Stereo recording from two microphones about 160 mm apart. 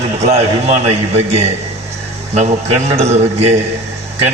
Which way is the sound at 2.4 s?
45° right (ahead or behind).